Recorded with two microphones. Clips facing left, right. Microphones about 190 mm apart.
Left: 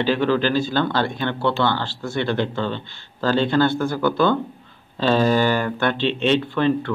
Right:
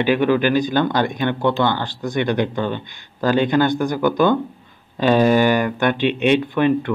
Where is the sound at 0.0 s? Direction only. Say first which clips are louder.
Right 3 dB; 15° right (ahead or behind).